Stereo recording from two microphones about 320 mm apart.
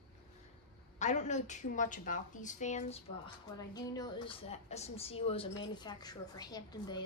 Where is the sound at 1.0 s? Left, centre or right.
Left.